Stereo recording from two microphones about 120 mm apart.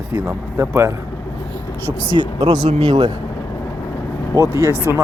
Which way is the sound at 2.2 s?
40° right (ahead or behind).